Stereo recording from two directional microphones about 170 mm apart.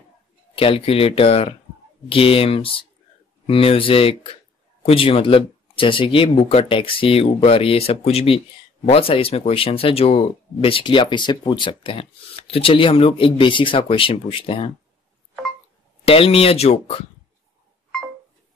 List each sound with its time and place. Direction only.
0.6 s speech: 35° left (ahead or behind)
16.1 s speech: 35° left (ahead or behind)